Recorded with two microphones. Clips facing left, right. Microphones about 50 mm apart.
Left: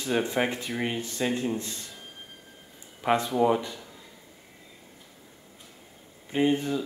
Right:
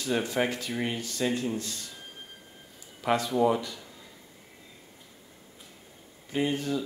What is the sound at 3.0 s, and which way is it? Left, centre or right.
Speech, left.